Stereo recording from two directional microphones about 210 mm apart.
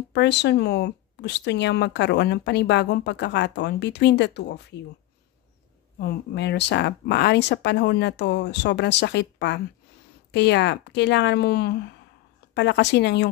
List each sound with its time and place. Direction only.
0.1 s speech: 55° left (ahead or behind)
5.9 s speech: 50° left (ahead or behind)